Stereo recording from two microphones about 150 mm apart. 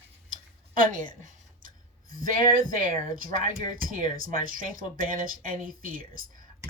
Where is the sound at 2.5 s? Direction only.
70° right (ahead or behind).